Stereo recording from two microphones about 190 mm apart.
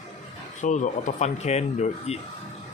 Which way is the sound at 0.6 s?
40° left (ahead or behind).